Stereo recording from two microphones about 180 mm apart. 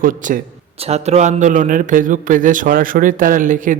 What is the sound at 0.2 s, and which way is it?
A man's voice, 45° right (ahead or behind).